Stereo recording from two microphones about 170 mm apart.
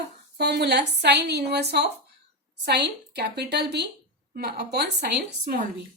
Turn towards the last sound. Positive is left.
turn(degrees=-70)  # may be behind; listen again after turning